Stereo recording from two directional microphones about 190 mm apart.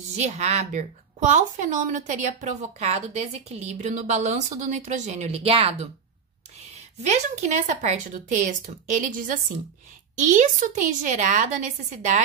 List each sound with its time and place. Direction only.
0.1 s a woman's voice: 35° right (ahead or behind)
7.0 s a woman's voice: 35° right (ahead or behind)